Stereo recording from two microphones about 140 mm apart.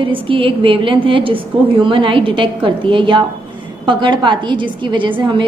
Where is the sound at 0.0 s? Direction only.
40° right (ahead or behind).